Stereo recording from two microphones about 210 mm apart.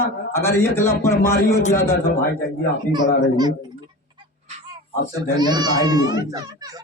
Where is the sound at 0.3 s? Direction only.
10° left (ahead or behind).